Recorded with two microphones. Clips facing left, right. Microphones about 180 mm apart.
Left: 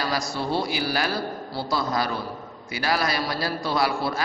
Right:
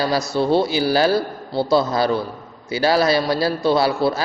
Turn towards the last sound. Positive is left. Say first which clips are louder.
# right 7 dB
turn(degrees=-30)  # may be behind; listen again after turning